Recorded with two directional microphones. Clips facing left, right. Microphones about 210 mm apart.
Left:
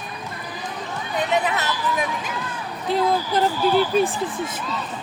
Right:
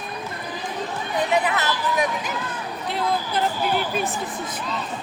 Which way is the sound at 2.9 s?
40° left (ahead or behind).